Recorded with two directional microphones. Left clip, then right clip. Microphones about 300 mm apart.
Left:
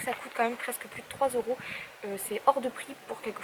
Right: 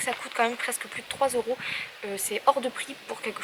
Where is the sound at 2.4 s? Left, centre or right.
Left.